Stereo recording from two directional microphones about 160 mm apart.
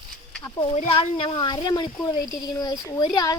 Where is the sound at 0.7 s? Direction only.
45° left (ahead or behind).